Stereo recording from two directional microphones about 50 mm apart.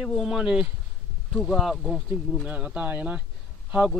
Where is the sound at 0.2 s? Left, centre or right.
Centre.